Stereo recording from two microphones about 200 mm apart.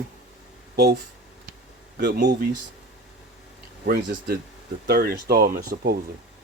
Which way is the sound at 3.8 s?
50° right (ahead or behind).